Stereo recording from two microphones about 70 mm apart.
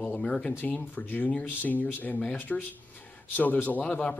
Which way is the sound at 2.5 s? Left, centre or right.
Centre.